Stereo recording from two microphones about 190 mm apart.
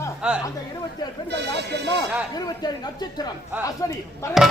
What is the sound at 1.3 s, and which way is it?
Speech, 65° right (ahead or behind).